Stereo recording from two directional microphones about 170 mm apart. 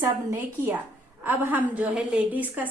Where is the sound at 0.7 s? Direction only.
10° right (ahead or behind).